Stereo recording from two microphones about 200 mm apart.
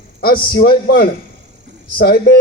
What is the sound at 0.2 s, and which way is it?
A man's voice, 50° left (ahead or behind).